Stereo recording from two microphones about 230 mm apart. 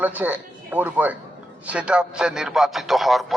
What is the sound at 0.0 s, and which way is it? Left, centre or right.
Speech, centre.